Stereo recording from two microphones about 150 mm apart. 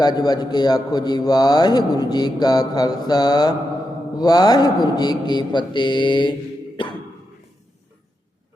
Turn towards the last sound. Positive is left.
turn(degrees=30)  # may be behind; listen again after turning